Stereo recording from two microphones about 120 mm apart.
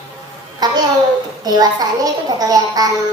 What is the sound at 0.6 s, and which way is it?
A child's voice, 35° right (ahead or behind).